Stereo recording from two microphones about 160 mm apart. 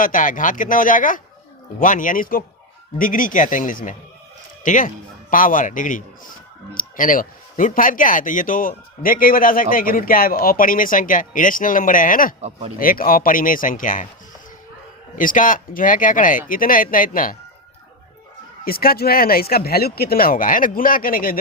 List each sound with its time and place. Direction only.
0.0 s a man's voice: 55° left (ahead or behind)
12.4 s speech: 40° right (ahead or behind)
12.8 s a man's voice: 65° left (ahead or behind)
15.2 s a man's voice: 55° left (ahead or behind)
18.6 s speech: 65° left (ahead or behind)